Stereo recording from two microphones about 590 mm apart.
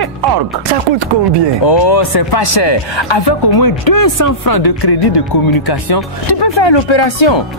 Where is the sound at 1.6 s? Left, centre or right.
Left.